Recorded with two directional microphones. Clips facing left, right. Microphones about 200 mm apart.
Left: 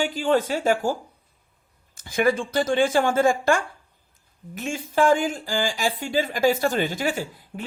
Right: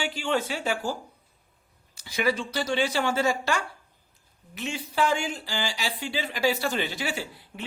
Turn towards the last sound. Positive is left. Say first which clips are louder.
# left 4 dB
turn(degrees=45)  # may be behind; listen again after turning